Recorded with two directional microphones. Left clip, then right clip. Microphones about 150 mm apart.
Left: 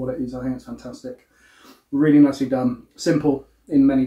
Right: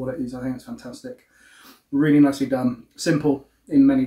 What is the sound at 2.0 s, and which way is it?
Speech, 25° right (ahead or behind).